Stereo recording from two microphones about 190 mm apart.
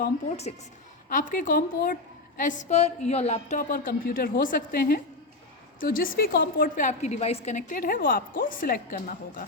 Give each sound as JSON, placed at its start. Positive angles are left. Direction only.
{"t": 1.1, "sound": "a woman's voice", "side_deg": 45}